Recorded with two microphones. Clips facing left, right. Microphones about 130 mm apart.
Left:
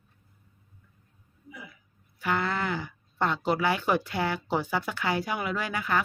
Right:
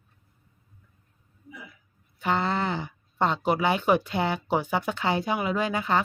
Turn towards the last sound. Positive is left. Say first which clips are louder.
# right 4 dB
turn(degrees=-25)  # may be behind; listen again after turning